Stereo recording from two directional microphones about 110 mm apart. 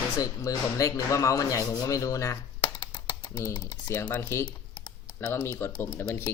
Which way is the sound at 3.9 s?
20° left (ahead or behind).